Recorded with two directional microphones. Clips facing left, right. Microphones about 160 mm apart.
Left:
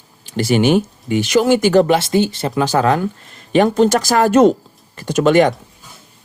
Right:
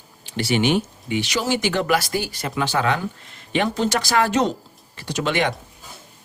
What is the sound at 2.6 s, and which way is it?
Speech, 40° left (ahead or behind).